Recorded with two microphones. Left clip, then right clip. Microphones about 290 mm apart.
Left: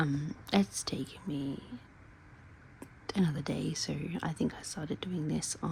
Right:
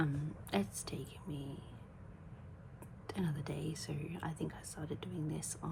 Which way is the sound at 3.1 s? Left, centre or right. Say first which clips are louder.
Left 8 dB; left.